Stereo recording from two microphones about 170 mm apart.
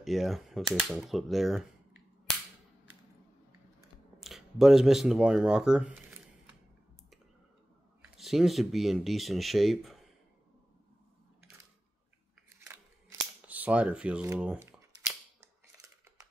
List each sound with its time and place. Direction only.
0.0 s speech: centre (ahead or behind)
4.2 s speech: centre (ahead or behind)
8.0 s speech: centre (ahead or behind)
12.5 s scissors: 15° right (ahead or behind)
13.5 s speech: 10° right (ahead or behind)
14.4 s camera: 10° right (ahead or behind)